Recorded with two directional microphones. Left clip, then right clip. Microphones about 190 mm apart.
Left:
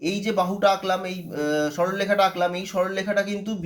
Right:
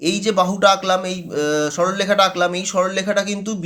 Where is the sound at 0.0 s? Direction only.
25° right (ahead or behind).